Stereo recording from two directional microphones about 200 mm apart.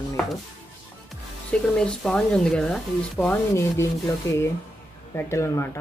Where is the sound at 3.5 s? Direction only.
15° left (ahead or behind).